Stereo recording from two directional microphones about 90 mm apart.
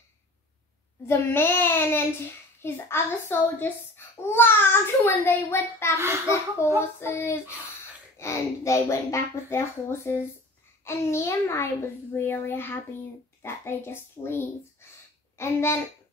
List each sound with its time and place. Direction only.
1.0 s a child's voice: 25° left (ahead or behind)
5.9 s a child's voice: 30° right (ahead or behind)
6.6 s a child's voice: 30° left (ahead or behind)